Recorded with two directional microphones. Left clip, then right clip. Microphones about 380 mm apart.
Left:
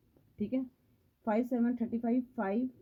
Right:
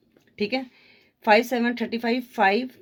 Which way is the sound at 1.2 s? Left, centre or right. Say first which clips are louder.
Right 13 dB; centre.